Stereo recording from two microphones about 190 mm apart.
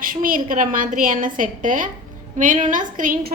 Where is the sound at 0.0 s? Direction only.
45° right (ahead or behind).